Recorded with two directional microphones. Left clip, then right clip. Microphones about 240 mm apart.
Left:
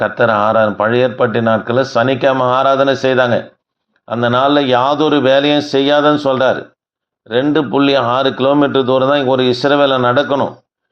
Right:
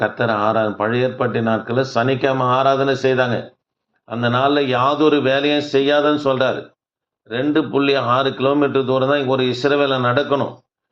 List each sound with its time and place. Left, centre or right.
0.0 s speech: left